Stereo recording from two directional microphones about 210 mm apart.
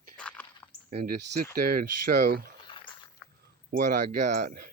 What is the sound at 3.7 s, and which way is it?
Speech, 40° right (ahead or behind).